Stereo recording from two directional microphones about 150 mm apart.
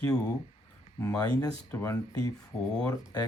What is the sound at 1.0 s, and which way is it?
Speech, 20° left (ahead or behind).